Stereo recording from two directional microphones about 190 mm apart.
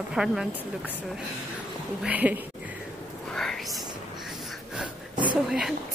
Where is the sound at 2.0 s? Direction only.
10° right (ahead or behind).